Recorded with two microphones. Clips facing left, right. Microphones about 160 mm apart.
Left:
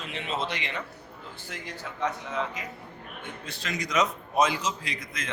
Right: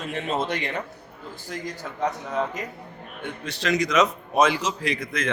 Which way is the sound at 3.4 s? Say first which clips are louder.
Right 11 dB; 80° right.